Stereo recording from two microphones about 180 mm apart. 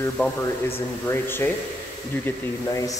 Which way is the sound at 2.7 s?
20° left (ahead or behind).